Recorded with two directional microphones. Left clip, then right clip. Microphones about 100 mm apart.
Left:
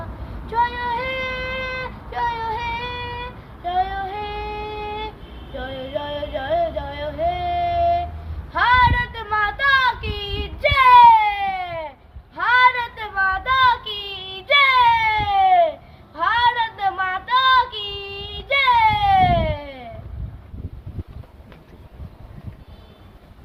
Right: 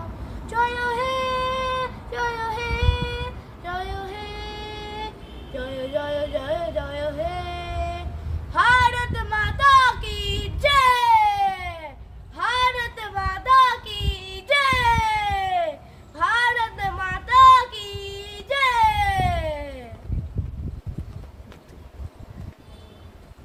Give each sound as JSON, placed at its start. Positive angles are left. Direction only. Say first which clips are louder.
{"t": 0.4, "sound": "child singing", "louder": "left 2 dB", "side_deg": 0}
{"t": 3.6, "sound": "female singing", "louder": "left 8 dB", "side_deg": 0}
{"t": 5.5, "sound": "music", "louder": "even", "side_deg": -5}
{"t": 8.5, "sound": "child singing", "louder": "left 2 dB", "side_deg": 0}
{"t": 12.4, "sound": "a sound", "louder": "left 6 dB", "side_deg": -5}
{"t": 13.0, "sound": "child singing", "louder": "left 7 dB", "side_deg": 10}
{"t": 14.8, "sound": "baby cry", "louder": "left 5 dB", "side_deg": 5}
{"t": 16.1, "sound": "child singing", "louder": "left 3 dB", "side_deg": 0}